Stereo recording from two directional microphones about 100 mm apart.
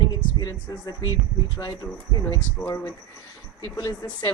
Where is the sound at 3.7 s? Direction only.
35° left (ahead or behind).